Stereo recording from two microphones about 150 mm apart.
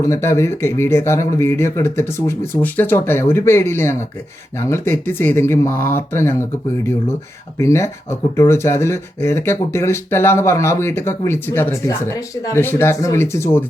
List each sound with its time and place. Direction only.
0.0 s speech: 20° left (ahead or behind)
7.6 s speech: 20° left (ahead or behind)